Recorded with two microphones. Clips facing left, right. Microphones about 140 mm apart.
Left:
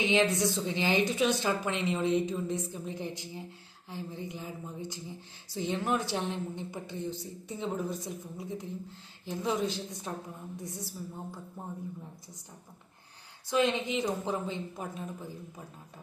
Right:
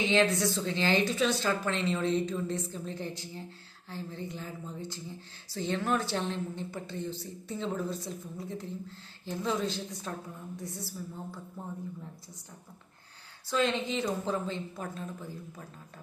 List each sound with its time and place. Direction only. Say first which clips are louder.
0.0 s a woman's voice: even; 15° left (ahead or behind)
13.5 s a woman's voice: left 1 dB; 15° left (ahead or behind)